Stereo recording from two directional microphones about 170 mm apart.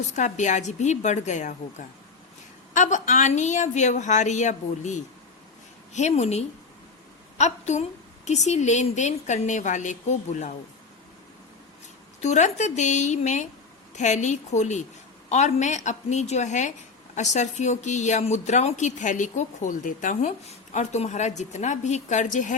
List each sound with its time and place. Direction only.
0.1 s a woman's voice: 45° left (ahead or behind)
2.7 s a woman's voice: 45° left (ahead or behind)
12.2 s a woman's voice: 45° left (ahead or behind)